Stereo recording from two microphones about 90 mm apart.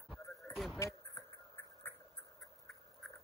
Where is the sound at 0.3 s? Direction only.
Centre (ahead or behind).